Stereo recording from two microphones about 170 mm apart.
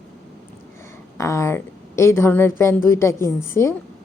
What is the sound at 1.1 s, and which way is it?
A woman's voice, 15° left (ahead or behind).